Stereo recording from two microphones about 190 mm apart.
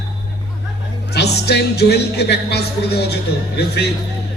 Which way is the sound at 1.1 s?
60° left (ahead or behind).